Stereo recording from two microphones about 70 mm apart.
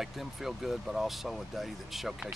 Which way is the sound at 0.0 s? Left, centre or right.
Centre.